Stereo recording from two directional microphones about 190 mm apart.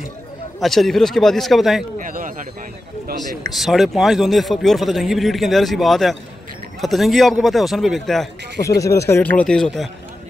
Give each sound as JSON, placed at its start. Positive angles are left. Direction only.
{"t": 0.6, "sound": "a man's voice", "side_deg": 0}
{"t": 2.0, "sound": "speech", "side_deg": -45}
{"t": 3.5, "sound": "a man's voice", "side_deg": 0}
{"t": 8.5, "sound": "speech", "side_deg": 15}